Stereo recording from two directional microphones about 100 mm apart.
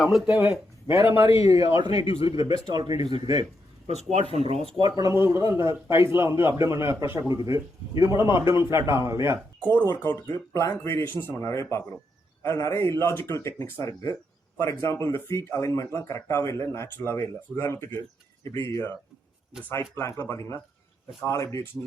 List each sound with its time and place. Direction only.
0.0 s speech: centre (ahead or behind)
1.4 s speech: 35° right (ahead or behind)
1.8 s a man's voice: 45° right (ahead or behind)
3.8 s speech: 85° right
4.8 s a man's voice: 50° right (ahead or behind)
5.1 s a man's voice: 25° right (ahead or behind)
9.6 s speech: 20° left (ahead or behind)
19.7 s speech: 30° left (ahead or behind)